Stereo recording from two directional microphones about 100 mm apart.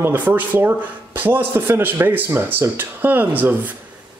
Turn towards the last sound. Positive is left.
turn(degrees=-15)  # may be behind; listen again after turning